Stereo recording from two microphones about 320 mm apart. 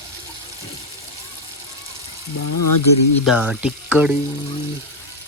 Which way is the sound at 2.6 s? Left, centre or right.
Left.